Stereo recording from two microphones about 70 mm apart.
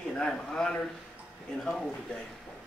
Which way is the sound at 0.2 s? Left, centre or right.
Centre.